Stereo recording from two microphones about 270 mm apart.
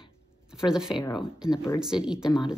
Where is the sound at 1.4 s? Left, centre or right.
Centre.